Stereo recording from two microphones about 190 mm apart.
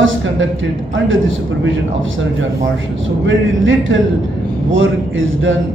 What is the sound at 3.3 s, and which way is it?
A man's voice, 90° right.